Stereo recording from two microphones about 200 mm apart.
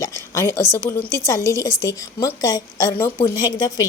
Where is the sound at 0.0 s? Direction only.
15° left (ahead or behind).